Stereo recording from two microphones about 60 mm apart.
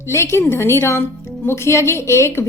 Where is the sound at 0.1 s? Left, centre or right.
Left.